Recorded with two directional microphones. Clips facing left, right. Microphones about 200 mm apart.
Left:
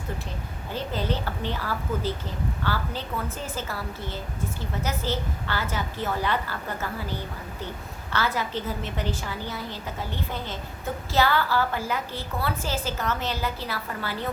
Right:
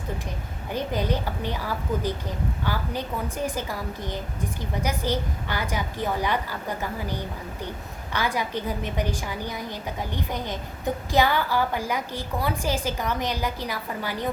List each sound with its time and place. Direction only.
0.7 s a woman's voice: 15° right (ahead or behind)